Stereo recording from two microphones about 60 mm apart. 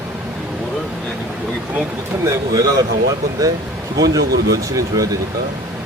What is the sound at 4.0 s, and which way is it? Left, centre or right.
Speech, right.